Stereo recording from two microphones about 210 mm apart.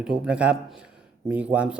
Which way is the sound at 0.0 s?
5° right (ahead or behind).